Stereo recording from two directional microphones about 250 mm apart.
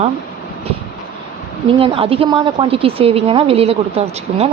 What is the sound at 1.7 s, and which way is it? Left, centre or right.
A woman's voice, right.